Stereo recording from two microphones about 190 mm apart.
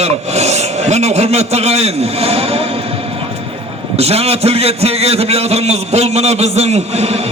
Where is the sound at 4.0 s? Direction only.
35° right (ahead or behind).